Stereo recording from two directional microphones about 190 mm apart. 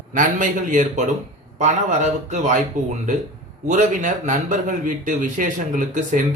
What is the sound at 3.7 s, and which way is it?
Speech, 40° right (ahead or behind).